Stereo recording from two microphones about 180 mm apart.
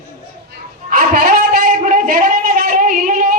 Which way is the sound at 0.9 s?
50° right (ahead or behind).